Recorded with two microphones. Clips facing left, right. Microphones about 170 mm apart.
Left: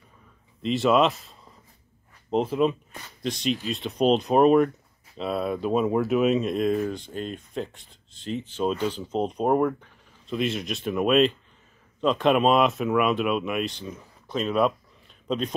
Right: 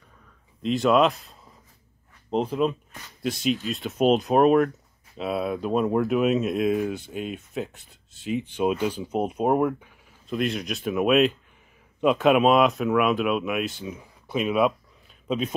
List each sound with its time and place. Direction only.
0.6 s speech: centre (ahead or behind)
2.3 s speech: centre (ahead or behind)